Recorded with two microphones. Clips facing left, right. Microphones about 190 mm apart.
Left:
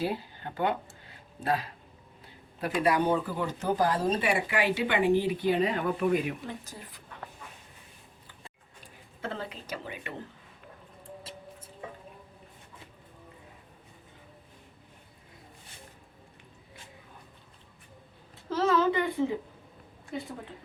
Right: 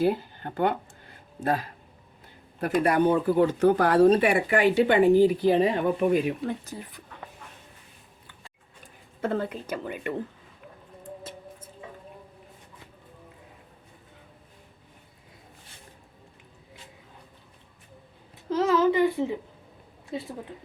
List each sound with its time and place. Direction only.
0.0 s speech: 50° right (ahead or behind)
5.5 s a child's voice: 25° right (ahead or behind)
8.8 s speech: 50° right (ahead or behind)
18.5 s a child's voice: 20° right (ahead or behind)